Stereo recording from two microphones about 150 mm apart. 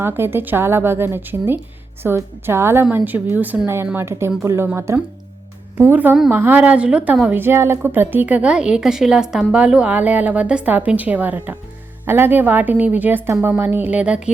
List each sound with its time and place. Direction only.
0.0 s a woman's voice: 15° right (ahead or behind)